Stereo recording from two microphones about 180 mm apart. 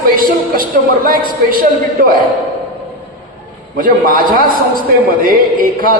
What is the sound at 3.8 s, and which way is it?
A man's voice, 50° right (ahead or behind).